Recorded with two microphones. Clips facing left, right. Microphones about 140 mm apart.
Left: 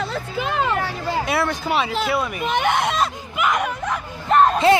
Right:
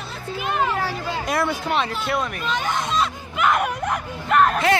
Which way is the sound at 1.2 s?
Centre (ahead or behind).